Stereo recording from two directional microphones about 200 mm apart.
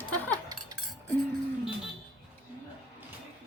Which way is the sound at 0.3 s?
20° right (ahead or behind).